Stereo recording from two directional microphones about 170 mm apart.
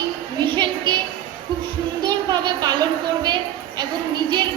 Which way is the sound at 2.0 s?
25° right (ahead or behind).